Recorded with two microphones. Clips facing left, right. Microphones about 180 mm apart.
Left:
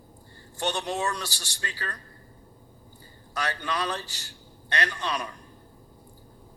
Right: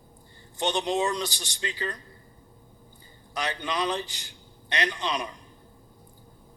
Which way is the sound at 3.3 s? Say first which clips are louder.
Even; 20° right (ahead or behind).